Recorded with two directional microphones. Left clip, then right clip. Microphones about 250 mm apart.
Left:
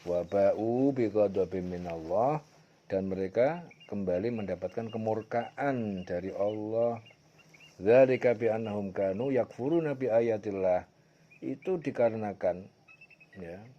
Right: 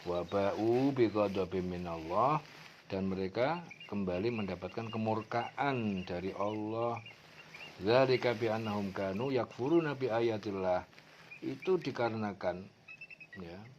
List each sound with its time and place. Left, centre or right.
0.1 s speech: left
11.9 s speech: left